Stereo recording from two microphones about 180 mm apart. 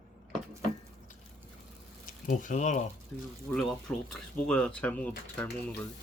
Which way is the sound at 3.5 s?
5° left (ahead or behind).